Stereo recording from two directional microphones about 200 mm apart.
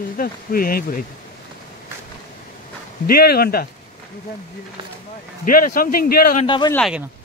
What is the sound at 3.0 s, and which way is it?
Speech, 50° left (ahead or behind).